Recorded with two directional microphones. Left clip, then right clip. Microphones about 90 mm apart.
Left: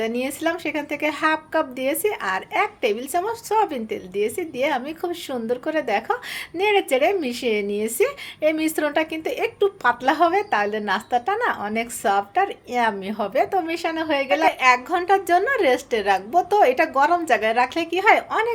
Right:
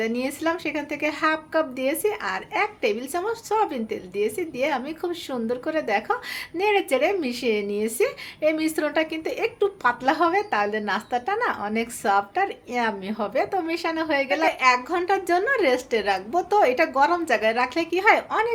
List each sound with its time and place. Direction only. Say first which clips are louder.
0.0 s a woman's voice: left 2 dB; 40° left (ahead or behind)